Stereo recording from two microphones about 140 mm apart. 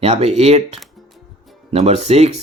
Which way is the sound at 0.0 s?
50° right (ahead or behind).